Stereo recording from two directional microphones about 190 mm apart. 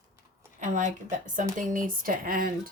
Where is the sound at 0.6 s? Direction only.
40° right (ahead or behind).